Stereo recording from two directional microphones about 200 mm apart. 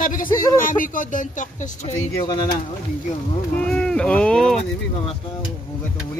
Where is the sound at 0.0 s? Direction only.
45° left (ahead or behind).